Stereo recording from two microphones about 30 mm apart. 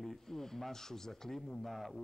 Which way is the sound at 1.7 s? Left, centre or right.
Centre.